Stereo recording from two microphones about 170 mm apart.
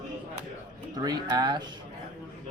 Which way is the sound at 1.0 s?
25° right (ahead or behind).